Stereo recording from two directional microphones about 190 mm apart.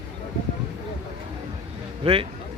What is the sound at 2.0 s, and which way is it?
Speech, 30° right (ahead or behind).